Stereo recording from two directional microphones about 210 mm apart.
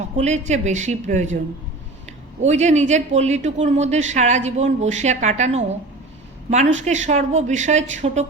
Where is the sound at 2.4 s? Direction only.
35° right (ahead or behind).